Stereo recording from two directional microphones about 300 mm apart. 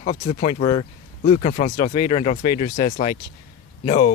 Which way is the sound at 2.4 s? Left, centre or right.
Left.